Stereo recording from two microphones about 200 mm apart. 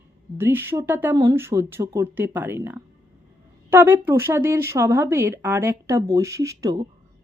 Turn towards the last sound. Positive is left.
turn(degrees=-15)  # may be behind; listen again after turning